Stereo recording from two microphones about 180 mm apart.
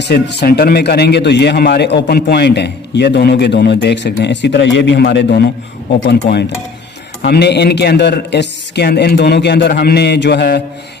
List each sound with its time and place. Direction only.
0.0 s a man's voice: 70° left (ahead or behind)